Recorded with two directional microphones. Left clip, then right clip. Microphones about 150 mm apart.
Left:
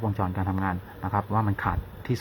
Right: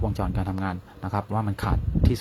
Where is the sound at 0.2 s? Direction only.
30° right (ahead or behind).